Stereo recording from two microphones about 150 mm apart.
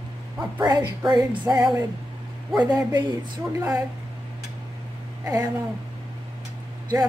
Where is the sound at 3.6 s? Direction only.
10° right (ahead or behind).